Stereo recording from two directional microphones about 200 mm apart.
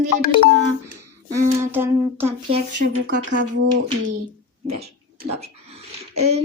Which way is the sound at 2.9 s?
80° right.